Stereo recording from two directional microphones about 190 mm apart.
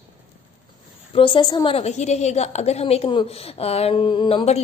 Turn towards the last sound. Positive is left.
turn(degrees=30)  # may be behind; listen again after turning